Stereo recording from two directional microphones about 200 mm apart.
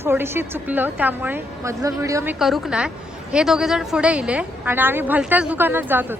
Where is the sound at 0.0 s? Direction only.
10° right (ahead or behind).